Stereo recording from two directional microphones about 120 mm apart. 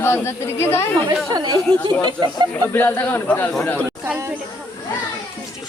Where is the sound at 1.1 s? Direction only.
35° right (ahead or behind).